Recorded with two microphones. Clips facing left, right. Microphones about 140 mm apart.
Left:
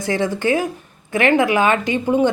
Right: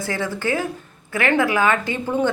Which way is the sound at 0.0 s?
20° left (ahead or behind).